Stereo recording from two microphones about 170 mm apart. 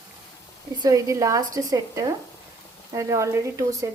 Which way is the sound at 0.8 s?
20° right (ahead or behind).